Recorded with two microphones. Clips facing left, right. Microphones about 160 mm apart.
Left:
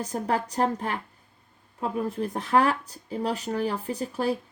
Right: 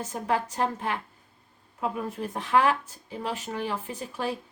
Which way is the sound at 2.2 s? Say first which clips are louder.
Even; 40° left (ahead or behind).